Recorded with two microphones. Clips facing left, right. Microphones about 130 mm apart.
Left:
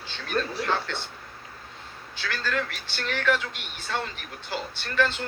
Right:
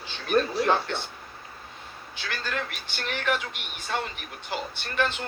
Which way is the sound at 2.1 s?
15° right (ahead or behind).